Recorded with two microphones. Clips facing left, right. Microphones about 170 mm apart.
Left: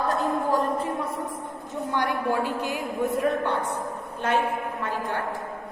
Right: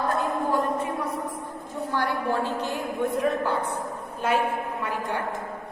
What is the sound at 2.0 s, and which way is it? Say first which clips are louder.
A woman's voice: left 1 dB; 15° left (ahead or behind).